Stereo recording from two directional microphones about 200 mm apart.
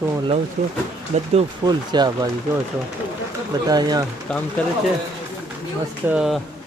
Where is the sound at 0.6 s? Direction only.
45° right (ahead or behind).